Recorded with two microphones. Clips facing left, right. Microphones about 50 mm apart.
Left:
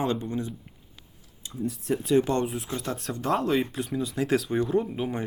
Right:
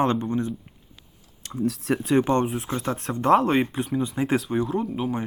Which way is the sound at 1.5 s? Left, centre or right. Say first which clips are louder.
Right 4 dB; right.